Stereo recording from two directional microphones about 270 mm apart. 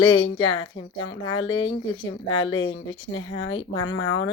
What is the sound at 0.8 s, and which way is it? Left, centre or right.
Speech, left.